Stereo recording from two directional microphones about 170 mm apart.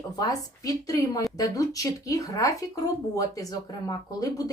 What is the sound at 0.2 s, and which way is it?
A woman's voice, 20° left (ahead or behind).